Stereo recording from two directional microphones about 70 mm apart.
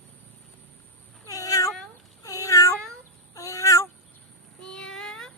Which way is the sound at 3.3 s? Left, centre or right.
Left.